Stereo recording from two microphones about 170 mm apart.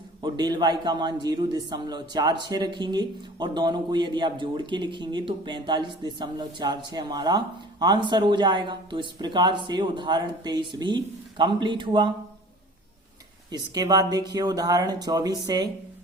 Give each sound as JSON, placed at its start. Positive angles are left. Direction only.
{"t": 0.2, "sound": "a man's voice", "side_deg": -25}
{"t": 13.5, "sound": "a man's voice", "side_deg": -25}